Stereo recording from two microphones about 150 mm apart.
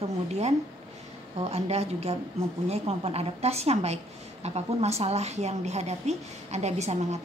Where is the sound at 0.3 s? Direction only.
45° right (ahead or behind).